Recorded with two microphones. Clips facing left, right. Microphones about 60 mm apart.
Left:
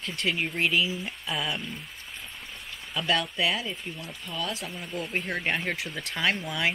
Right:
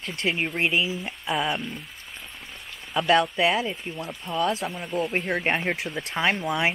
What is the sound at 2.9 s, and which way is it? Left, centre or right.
Speech, right.